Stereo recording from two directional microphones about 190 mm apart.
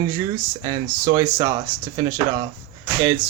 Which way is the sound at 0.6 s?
20° right (ahead or behind).